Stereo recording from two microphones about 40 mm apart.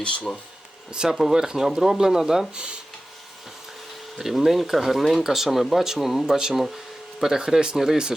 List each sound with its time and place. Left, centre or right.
0.0 s speech: left
0.9 s speech: centre
4.2 s speech: centre
6.5 s speech: centre